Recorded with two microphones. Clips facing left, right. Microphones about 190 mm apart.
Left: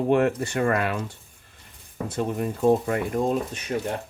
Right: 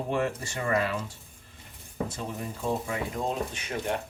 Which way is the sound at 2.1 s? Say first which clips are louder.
Left 9 dB; 60° left (ahead or behind).